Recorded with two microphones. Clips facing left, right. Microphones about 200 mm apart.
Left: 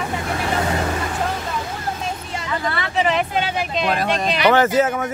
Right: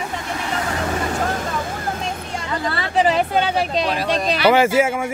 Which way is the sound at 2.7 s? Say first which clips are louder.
Right 3 dB; 35° right (ahead or behind).